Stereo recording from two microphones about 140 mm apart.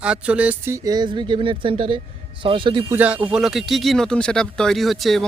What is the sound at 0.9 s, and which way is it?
Speech, 30° right (ahead or behind).